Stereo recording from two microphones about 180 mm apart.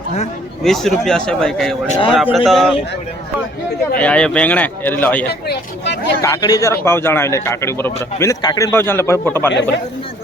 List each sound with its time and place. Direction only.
0.6 s a man's voice: centre (ahead or behind)
3.9 s a man's voice: 5° left (ahead or behind)
5.3 s speech: 70° left (ahead or behind)
6.2 s a man's voice: 20° left (ahead or behind)